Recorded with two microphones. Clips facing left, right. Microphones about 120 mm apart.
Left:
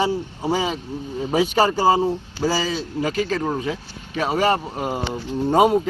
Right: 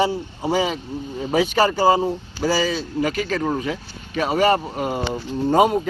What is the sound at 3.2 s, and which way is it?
Speech, centre (ahead or behind).